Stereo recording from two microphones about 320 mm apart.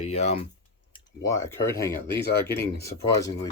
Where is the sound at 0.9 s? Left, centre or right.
Centre.